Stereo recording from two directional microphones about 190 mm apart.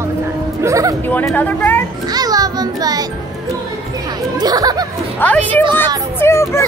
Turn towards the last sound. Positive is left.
turn(degrees=15)  # may be behind; listen again after turning